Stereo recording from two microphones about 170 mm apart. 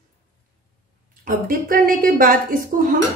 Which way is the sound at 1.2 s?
55° right (ahead or behind).